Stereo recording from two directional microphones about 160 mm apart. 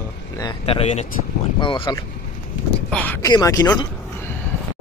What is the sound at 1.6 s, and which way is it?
Speech, 30° left (ahead or behind).